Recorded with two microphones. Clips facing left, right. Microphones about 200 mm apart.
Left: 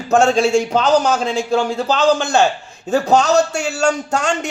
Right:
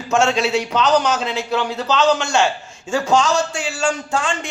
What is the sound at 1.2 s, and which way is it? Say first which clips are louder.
A man's voice: left 4 dB; 45° left (ahead or behind).